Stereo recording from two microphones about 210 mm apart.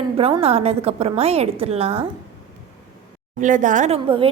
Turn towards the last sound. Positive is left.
turn(degrees=-25)  # may be behind; listen again after turning